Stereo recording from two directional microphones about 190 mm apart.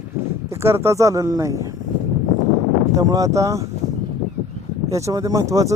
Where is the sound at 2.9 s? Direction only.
20° right (ahead or behind).